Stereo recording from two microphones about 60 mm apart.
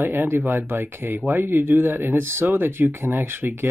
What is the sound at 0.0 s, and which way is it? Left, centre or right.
Speech, right.